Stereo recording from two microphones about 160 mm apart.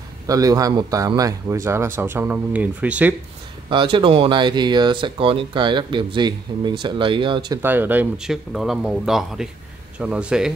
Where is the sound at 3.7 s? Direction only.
30° right (ahead or behind).